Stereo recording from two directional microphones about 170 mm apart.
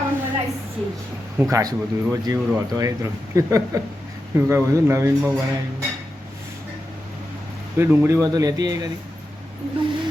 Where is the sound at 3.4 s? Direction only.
20° right (ahead or behind).